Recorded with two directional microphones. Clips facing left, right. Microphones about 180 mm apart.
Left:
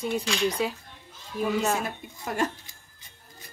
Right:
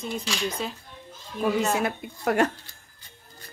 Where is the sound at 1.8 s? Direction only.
70° right (ahead or behind).